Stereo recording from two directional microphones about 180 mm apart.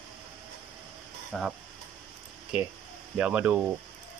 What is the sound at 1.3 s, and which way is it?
Speech, centre (ahead or behind).